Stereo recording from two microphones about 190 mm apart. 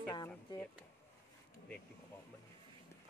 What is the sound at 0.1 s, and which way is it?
Speech, 25° left (ahead or behind).